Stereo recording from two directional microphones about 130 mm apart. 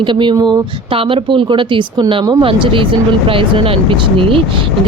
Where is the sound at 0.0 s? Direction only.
40° right (ahead or behind).